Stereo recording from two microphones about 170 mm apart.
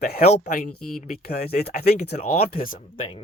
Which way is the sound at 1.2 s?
65° left (ahead or behind).